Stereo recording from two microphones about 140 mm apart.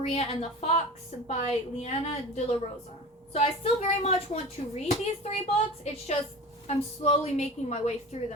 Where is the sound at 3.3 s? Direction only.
50° left (ahead or behind).